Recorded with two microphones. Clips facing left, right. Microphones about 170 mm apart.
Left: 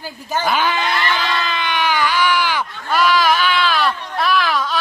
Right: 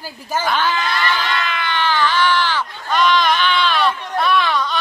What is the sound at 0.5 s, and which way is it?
Speech, 15° left (ahead or behind).